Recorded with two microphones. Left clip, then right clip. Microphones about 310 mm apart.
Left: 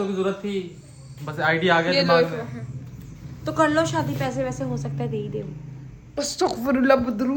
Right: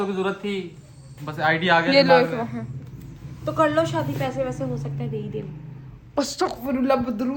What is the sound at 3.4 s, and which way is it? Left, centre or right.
A woman's voice, left.